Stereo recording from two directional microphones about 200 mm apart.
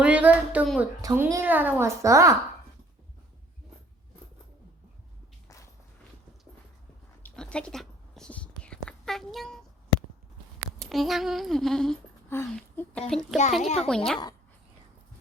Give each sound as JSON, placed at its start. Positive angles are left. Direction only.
{"t": 0.0, "sound": "a woman's voice", "side_deg": -5}
{"t": 7.2, "sound": "whispering", "side_deg": 5}
{"t": 10.8, "sound": "humming", "side_deg": 0}
{"t": 13.6, "sound": "speech", "side_deg": 35}
{"t": 13.8, "sound": "a woman's voice", "side_deg": 5}